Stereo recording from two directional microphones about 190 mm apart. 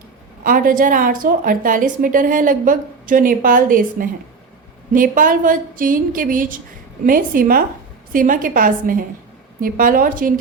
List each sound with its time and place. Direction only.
0.4 s a woman's voice: 45° right (ahead or behind)